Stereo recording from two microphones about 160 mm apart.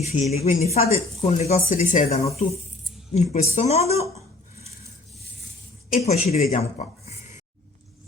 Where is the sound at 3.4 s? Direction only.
40° left (ahead or behind).